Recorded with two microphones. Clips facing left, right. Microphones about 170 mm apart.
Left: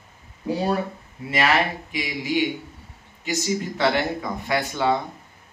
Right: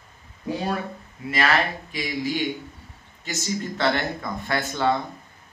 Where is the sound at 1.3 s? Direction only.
20° left (ahead or behind).